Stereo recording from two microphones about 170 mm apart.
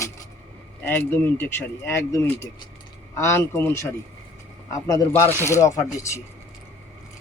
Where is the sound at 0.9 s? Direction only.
10° left (ahead or behind).